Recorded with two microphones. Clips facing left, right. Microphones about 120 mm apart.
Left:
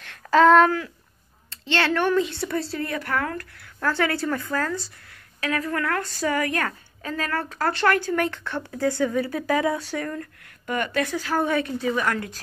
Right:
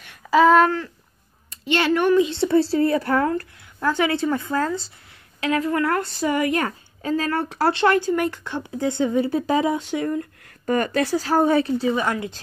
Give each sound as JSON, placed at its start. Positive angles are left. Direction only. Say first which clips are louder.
{"t": 0.0, "sound": "a sound", "louder": "right 1 dB", "side_deg": -5}
{"t": 1.5, "sound": "a woman's voice", "louder": "right 3 dB", "side_deg": -15}
{"t": 3.8, "sound": "a woman's voice", "louder": "right 3 dB", "side_deg": -15}
{"t": 10.7, "sound": "a woman's voice", "louder": "right 5 dB", "side_deg": -35}